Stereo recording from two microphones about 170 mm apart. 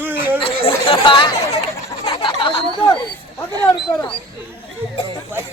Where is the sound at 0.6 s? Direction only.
35° left (ahead or behind).